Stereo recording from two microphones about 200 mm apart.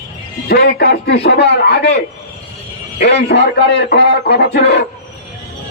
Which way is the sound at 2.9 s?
60° left (ahead or behind).